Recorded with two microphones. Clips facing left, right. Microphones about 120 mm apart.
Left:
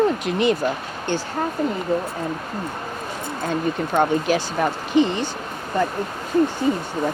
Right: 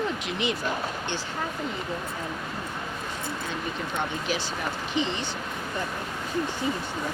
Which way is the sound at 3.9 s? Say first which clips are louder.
Left 12 dB; 50° left (ahead or behind).